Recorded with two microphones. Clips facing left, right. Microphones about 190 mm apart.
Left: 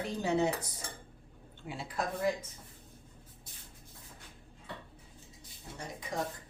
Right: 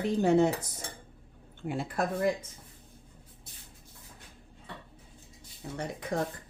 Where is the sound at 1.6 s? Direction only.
50° right (ahead or behind).